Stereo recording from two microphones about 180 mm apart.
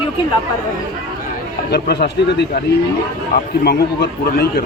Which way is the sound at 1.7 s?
60° left (ahead or behind).